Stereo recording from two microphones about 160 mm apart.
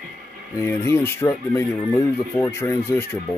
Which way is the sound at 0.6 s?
15° left (ahead or behind).